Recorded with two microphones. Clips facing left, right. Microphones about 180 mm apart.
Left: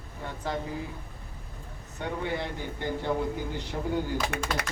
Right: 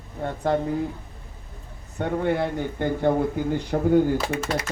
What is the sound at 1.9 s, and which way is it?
Speech, 50° right (ahead or behind).